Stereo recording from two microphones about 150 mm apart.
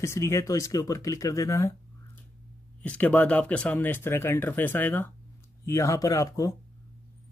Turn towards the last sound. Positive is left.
turn(degrees=20)  # may be behind; listen again after turning